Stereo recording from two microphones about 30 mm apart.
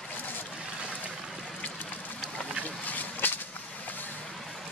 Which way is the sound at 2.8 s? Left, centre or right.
Left.